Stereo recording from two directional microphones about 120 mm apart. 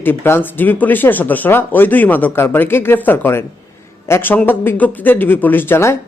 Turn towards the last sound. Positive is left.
turn(degrees=20)  # may be behind; listen again after turning